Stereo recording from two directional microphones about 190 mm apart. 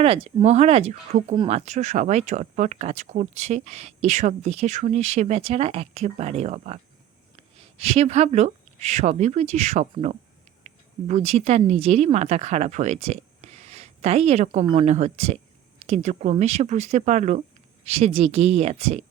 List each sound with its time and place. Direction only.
0.0 s speech: 30° right (ahead or behind)
7.8 s speech: 30° right (ahead or behind)